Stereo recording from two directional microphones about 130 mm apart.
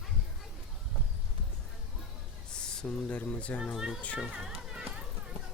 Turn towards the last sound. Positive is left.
turn(degrees=-5)  # may be behind; listen again after turning